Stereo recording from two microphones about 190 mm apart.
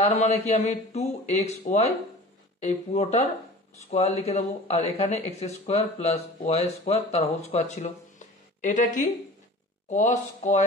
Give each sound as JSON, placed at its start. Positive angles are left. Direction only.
{"t": 0.0, "sound": "speech", "side_deg": 35}